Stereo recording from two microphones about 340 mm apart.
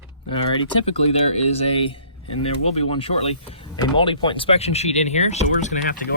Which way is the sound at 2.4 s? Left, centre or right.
Centre.